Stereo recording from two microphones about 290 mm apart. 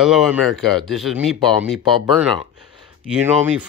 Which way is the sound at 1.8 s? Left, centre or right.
Centre.